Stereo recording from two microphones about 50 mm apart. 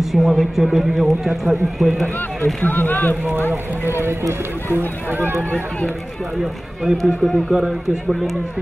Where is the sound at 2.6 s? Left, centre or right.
Left.